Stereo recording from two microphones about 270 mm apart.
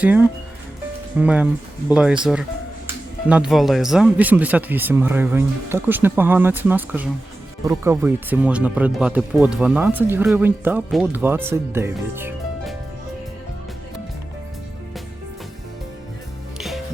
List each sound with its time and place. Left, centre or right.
0.0 s speech: centre
16.6 s music: centre